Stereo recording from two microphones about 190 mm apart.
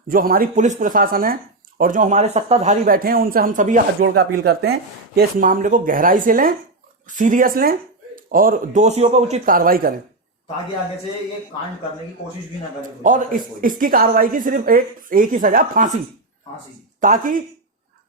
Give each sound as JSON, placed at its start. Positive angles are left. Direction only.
{"t": 0.1, "sound": "speech", "side_deg": -50}
{"t": 2.8, "sound": "speech", "side_deg": -50}
{"t": 13.0, "sound": "speech", "side_deg": -45}
{"t": 17.0, "sound": "speech", "side_deg": -45}